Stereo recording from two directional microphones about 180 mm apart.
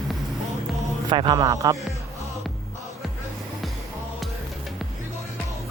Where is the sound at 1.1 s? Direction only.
25° right (ahead or behind).